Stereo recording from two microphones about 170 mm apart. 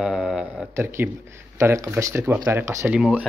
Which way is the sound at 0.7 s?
15° right (ahead or behind).